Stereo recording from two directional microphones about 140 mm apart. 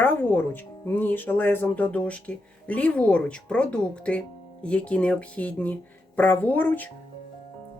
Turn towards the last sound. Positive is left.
turn(degrees=10)  # may be behind; listen again after turning